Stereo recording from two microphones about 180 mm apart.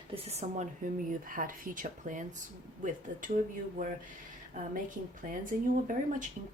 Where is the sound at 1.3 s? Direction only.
50° right (ahead or behind).